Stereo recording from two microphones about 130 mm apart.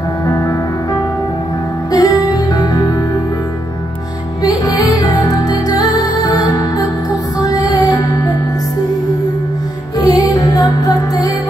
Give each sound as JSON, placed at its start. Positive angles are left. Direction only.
{"t": 1.9, "sound": "music", "side_deg": 30}
{"t": 4.4, "sound": "music", "side_deg": 30}
{"t": 9.9, "sound": "music", "side_deg": 30}